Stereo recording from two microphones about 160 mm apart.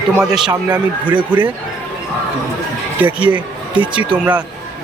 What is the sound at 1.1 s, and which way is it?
Speech, 30° right (ahead or behind).